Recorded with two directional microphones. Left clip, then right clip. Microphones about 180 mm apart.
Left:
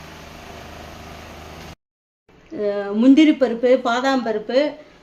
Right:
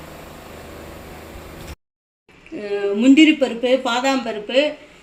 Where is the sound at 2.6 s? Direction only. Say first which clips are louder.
Even; 35° left (ahead or behind).